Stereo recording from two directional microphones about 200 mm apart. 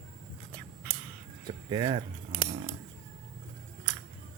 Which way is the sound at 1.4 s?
20° right (ahead or behind).